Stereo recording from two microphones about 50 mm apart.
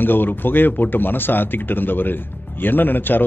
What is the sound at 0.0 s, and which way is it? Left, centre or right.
Speech, left.